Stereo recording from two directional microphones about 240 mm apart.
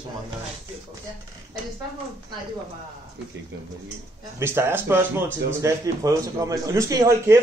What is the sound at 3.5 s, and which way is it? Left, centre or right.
Speech, right.